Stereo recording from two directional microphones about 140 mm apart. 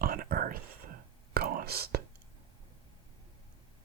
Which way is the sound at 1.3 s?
90° right.